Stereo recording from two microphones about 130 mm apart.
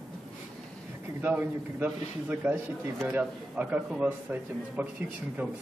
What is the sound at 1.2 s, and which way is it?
A man's voice, 15° right (ahead or behind).